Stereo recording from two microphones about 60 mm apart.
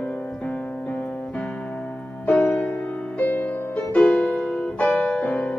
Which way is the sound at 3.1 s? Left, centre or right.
Left.